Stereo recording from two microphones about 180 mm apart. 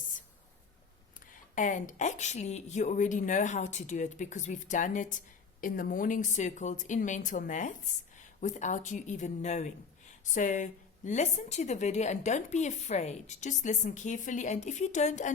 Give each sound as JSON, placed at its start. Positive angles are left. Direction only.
{"t": 1.3, "sound": "a woman's voice", "side_deg": 45}